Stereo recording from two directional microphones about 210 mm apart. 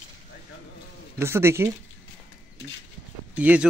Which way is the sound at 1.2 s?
10° right (ahead or behind).